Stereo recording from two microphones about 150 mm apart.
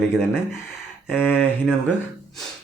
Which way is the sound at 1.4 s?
5° right (ahead or behind).